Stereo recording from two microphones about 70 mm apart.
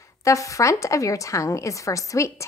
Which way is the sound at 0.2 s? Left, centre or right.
Left.